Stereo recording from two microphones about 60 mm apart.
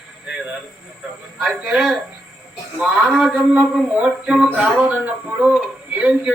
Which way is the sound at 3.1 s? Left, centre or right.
Centre.